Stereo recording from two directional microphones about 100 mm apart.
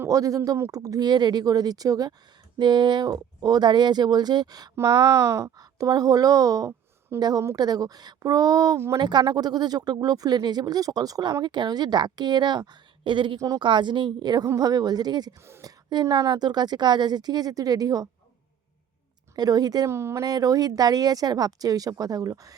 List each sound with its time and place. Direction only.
0.1 s speech: 35° right (ahead or behind)
2.6 s speech: 50° right (ahead or behind)
15.4 s speech: 25° right (ahead or behind)
15.9 s speech: 45° right (ahead or behind)
19.4 s speech: 40° right (ahead or behind)
19.9 s speech: 25° right (ahead or behind)
20.2 s speech: 40° right (ahead or behind)